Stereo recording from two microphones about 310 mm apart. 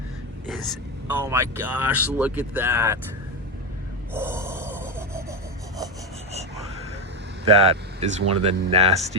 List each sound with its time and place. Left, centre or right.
1.0 s speech: centre
4.1 s gasp: centre
7.4 s speech: centre